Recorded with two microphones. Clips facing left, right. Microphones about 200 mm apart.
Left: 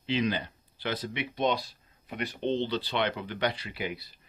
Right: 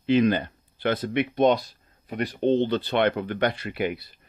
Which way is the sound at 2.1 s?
40° right (ahead or behind).